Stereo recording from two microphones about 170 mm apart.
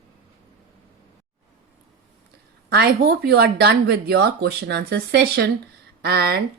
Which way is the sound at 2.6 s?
70° right (ahead or behind).